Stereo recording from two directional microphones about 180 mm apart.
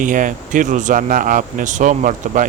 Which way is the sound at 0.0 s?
45° right (ahead or behind).